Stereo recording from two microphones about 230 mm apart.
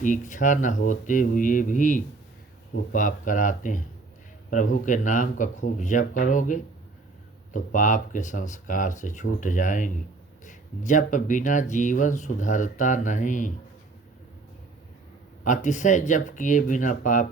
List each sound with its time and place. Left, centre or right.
0.0 s speech: left
15.4 s speech: left